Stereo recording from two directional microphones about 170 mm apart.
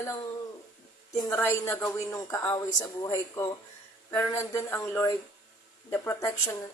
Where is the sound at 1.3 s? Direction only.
15° left (ahead or behind).